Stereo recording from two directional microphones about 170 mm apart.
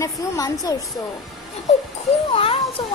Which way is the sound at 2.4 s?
35° left (ahead or behind).